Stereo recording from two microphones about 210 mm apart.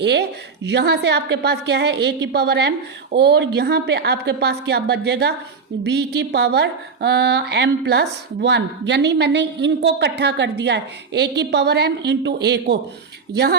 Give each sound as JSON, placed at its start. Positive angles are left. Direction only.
{"t": 0.0, "sound": "a woman's voice", "side_deg": -55}